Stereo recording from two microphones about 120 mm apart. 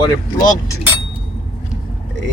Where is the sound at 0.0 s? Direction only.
35° left (ahead or behind).